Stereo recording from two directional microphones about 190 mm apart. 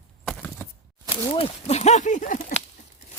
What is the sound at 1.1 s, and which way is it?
Speech, 30° left (ahead or behind).